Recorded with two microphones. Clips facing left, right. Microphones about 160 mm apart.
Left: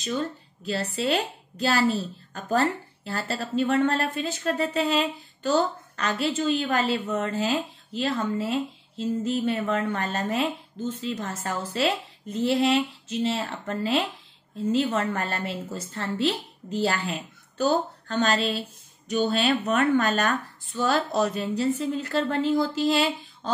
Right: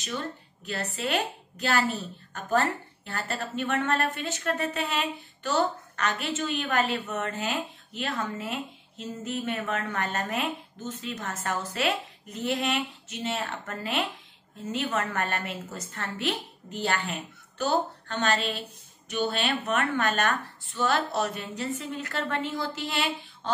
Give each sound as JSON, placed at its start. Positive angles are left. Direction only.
{"t": 1.0, "sound": "a woman's voice", "side_deg": 30}